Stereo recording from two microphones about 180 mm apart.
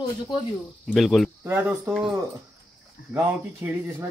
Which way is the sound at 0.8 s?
Centre (ahead or behind).